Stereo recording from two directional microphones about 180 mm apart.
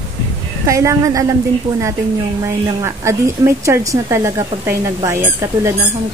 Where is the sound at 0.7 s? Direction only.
15° right (ahead or behind).